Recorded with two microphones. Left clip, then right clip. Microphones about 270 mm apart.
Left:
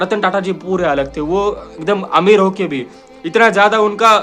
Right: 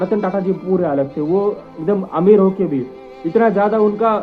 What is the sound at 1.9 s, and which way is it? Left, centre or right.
A man's voice, centre.